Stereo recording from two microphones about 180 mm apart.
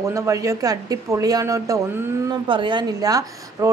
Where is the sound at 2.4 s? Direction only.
25° right (ahead or behind).